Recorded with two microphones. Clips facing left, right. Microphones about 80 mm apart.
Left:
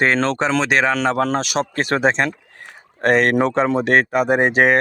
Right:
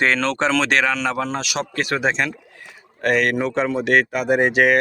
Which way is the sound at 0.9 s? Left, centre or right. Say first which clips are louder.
Left 4 dB; left.